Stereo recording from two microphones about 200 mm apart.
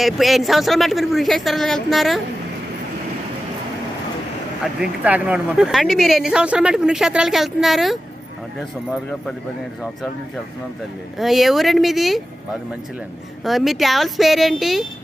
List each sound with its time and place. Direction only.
0.0 s speech: centre (ahead or behind)
5.0 s speech: 5° right (ahead or behind)
11.2 s speech: centre (ahead or behind)
13.4 s speech: centre (ahead or behind)